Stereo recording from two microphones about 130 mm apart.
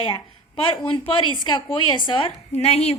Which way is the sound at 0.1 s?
40° left (ahead or behind).